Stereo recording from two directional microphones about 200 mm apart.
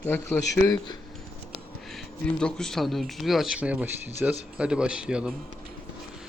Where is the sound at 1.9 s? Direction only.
5° left (ahead or behind).